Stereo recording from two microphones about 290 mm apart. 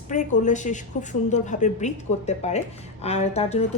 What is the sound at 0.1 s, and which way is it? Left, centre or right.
A woman's voice, left.